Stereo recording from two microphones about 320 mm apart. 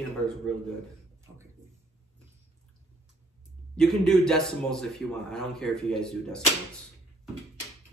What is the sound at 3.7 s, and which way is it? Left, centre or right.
A man's voice, centre.